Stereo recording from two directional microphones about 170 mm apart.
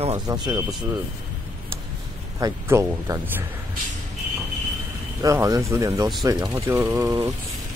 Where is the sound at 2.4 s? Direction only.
20° right (ahead or behind).